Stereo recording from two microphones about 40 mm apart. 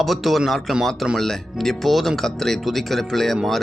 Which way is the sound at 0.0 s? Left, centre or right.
Centre.